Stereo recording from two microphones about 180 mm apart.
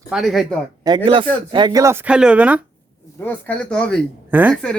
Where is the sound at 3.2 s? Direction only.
10° left (ahead or behind).